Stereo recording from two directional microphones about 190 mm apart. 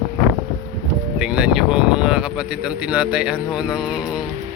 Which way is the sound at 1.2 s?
5° right (ahead or behind).